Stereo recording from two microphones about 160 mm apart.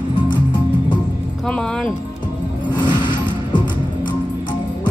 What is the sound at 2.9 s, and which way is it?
Vehicle, 30° left (ahead or behind).